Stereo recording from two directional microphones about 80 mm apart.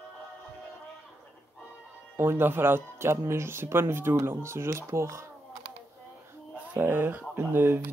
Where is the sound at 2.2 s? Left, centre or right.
Right.